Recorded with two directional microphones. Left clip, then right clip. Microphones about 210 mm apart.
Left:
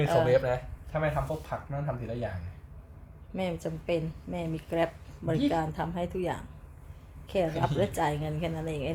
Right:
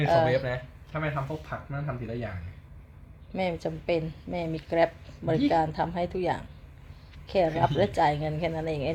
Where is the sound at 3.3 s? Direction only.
15° right (ahead or behind).